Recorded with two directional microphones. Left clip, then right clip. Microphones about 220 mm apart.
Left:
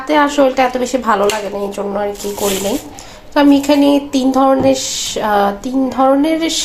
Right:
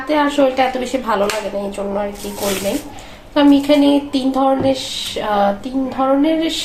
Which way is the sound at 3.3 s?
30° left (ahead or behind).